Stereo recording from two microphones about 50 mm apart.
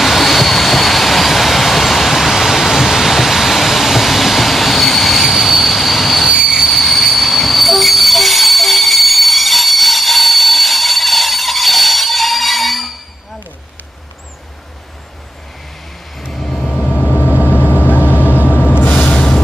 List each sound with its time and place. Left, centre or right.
0.0 s vehicle: centre
6.3 s train: centre
16.3 s vehicle: centre
16.9 s vehicle: left
17.3 s vehicle: right
18.6 s vehicle: left
18.9 s vehicle: left